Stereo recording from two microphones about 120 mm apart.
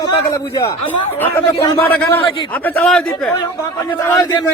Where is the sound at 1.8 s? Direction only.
15° left (ahead or behind).